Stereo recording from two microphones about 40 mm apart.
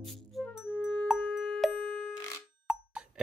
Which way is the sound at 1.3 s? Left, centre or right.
Centre.